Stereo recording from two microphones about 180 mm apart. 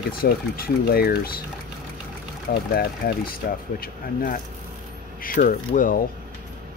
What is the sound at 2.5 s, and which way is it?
Speech, 60° left (ahead or behind).